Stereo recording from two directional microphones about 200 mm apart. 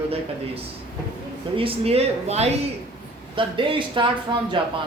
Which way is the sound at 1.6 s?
30° right (ahead or behind).